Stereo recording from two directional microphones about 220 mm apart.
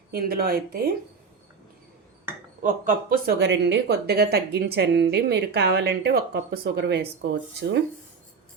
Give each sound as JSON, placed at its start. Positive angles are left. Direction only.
{"t": 0.1, "sound": "speech", "side_deg": -45}
{"t": 2.6, "sound": "speech", "side_deg": -35}
{"t": 3.3, "sound": "speech", "side_deg": -50}